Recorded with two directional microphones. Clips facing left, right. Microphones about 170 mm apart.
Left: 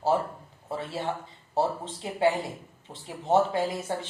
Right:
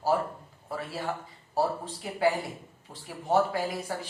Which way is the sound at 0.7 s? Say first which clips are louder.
Left 2 dB; 25° left (ahead or behind).